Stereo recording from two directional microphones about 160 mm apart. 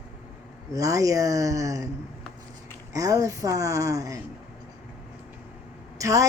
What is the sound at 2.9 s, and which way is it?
A child's voice, 20° right (ahead or behind).